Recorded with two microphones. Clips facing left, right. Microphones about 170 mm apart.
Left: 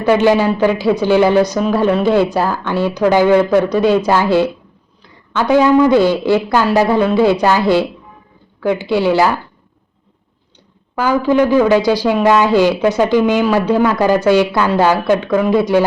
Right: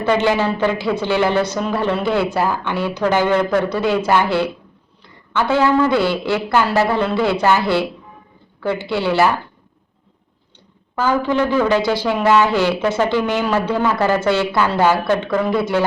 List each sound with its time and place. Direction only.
0.3 s a man's voice: 10° left (ahead or behind)
10.9 s a man's voice: 10° left (ahead or behind)